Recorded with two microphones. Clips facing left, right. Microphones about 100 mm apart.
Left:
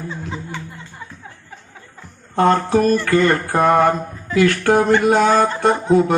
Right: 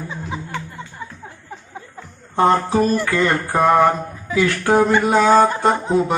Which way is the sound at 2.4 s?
65° left (ahead or behind).